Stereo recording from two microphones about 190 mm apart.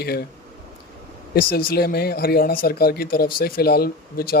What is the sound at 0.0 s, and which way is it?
Speech, 55° left (ahead or behind).